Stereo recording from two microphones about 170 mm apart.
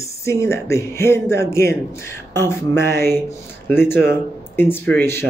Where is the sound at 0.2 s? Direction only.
15° left (ahead or behind).